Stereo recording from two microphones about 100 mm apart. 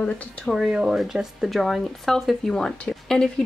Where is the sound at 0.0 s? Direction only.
10° left (ahead or behind).